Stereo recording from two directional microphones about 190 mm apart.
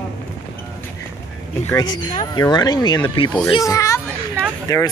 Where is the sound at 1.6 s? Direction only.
20° left (ahead or behind).